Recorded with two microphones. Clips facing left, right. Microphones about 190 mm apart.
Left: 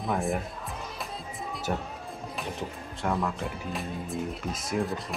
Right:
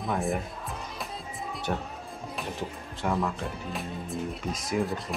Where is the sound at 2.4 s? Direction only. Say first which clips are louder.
Right 1 dB; centre (ahead or behind).